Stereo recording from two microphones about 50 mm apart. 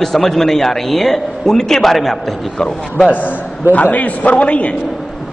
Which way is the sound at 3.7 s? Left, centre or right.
Left.